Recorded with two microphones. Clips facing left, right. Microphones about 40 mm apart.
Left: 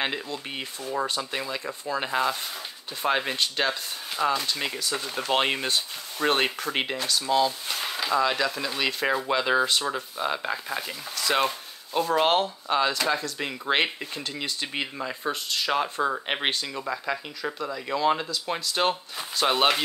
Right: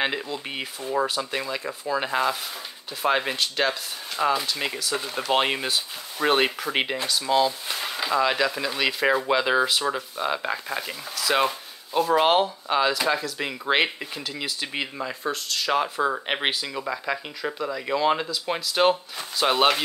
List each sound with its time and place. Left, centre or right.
0.0 s speech: centre
15.7 s speech: centre